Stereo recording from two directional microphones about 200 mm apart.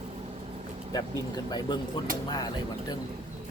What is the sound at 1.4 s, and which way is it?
Speech, 20° left (ahead or behind).